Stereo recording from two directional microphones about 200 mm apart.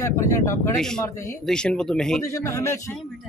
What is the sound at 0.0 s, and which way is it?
Speech, 15° left (ahead or behind).